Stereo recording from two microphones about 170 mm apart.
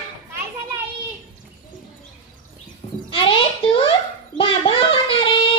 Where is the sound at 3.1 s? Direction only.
30° left (ahead or behind).